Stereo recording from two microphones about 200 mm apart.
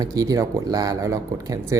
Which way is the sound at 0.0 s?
20° right (ahead or behind).